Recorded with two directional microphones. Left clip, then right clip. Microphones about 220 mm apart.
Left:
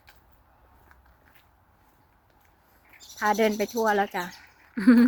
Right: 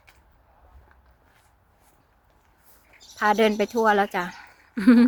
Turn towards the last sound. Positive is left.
turn(degrees=-15)  # may be behind; listen again after turning